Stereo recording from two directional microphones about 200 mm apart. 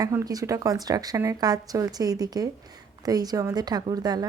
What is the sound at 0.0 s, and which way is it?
A woman's voice, 20° right (ahead or behind).